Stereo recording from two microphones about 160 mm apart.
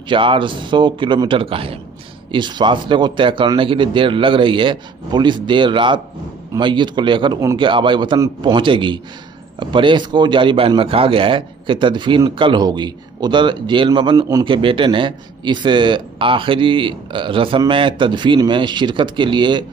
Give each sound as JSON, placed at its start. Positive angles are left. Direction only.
{"t": 0.1, "sound": "a man's voice", "side_deg": -30}